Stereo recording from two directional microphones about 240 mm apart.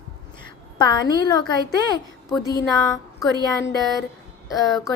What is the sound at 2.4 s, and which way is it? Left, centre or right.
Speech, centre.